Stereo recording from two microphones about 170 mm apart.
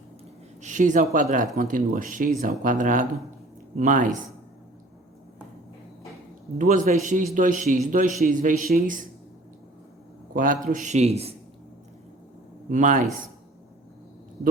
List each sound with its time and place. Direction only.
0.6 s speech: 45° right (ahead or behind)
6.6 s speech: 45° right (ahead or behind)
10.3 s speech: 50° right (ahead or behind)
12.7 s speech: 50° right (ahead or behind)